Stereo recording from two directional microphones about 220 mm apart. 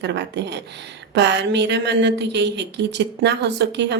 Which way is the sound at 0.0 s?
50° right (ahead or behind).